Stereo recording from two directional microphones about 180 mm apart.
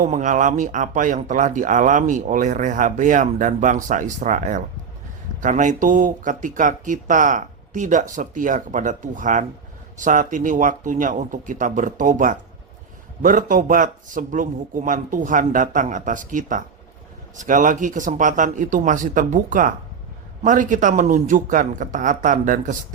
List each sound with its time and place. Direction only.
0.0 s speech: 45° right (ahead or behind)